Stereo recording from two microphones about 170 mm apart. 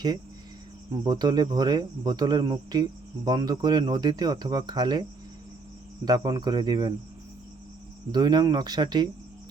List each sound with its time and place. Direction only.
1.0 s speech: 25° right (ahead or behind)
6.1 s speech: 20° right (ahead or behind)
8.1 s speech: 25° right (ahead or behind)